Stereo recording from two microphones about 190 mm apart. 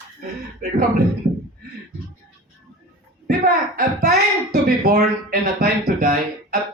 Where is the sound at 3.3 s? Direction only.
50° right (ahead or behind).